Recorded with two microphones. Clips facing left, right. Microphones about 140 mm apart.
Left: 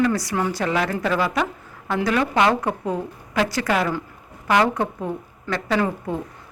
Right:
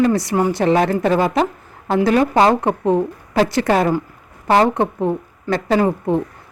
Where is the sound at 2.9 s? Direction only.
25° right (ahead or behind).